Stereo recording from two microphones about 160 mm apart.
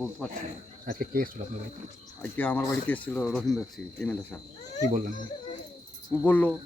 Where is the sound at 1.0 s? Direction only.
65° right (ahead or behind).